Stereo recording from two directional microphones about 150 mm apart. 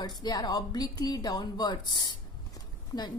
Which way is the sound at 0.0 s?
25° left (ahead or behind).